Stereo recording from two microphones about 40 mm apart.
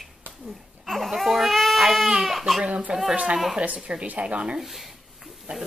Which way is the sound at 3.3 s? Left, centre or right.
Centre.